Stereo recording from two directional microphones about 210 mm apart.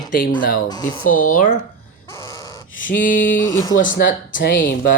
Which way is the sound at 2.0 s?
15° left (ahead or behind).